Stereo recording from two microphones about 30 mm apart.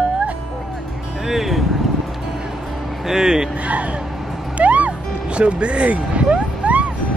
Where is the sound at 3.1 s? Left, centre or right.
Centre.